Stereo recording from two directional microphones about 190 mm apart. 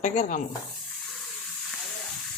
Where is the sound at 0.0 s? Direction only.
40° left (ahead or behind).